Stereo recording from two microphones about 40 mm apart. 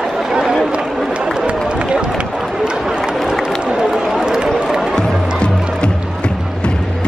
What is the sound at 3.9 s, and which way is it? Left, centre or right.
Run, centre.